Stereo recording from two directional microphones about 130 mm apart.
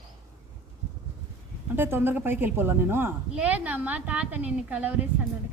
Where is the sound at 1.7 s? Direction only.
15° right (ahead or behind).